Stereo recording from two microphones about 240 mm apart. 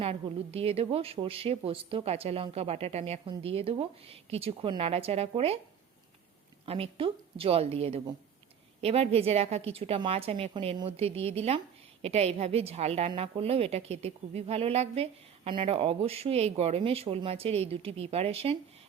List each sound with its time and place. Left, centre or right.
0.0 s a woman's voice: right
6.7 s a woman's voice: right